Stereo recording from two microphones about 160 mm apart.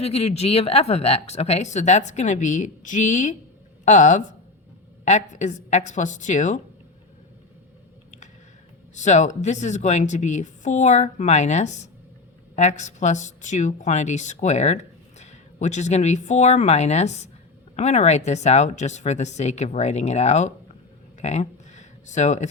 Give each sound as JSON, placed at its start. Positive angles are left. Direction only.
{"t": 0.0, "sound": "a woman's voice", "side_deg": 40}
{"t": 9.0, "sound": "a woman's voice", "side_deg": 50}
{"t": 21.2, "sound": "a sound", "side_deg": 45}